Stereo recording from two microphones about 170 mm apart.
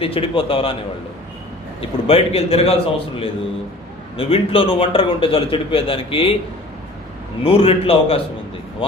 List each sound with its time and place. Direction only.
0.0 s a man's voice: 35° left (ahead or behind)
2.0 s a man's voice: 35° left (ahead or behind)
7.4 s a man's voice: 35° left (ahead or behind)